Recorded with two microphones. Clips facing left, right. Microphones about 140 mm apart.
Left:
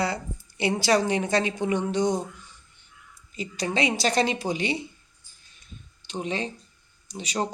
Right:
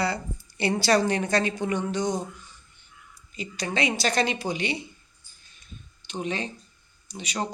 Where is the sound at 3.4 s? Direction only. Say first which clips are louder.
Left 2 dB; 30° left (ahead or behind).